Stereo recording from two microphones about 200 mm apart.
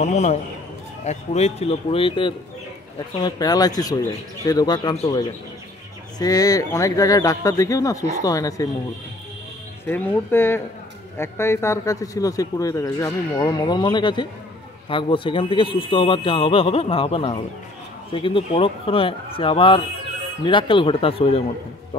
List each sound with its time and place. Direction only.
0.0 s a man's voice: 35° left (ahead or behind); by 8.6 s 15° left (ahead or behind)
9.8 s speech: 10° left (ahead or behind); by 21.4 s 30° left (ahead or behind)